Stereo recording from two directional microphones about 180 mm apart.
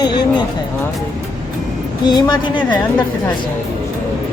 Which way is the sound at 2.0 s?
25° left (ahead or behind).